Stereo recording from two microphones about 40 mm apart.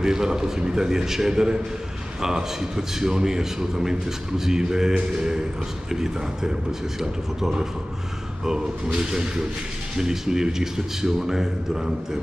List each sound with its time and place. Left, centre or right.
0.0 s a man's voice: centre